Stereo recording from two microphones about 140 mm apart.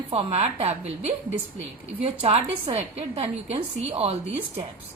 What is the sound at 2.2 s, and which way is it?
A woman's voice, 50° right (ahead or behind).